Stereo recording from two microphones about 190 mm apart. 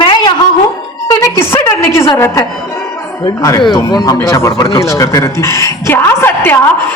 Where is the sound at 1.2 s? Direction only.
15° left (ahead or behind).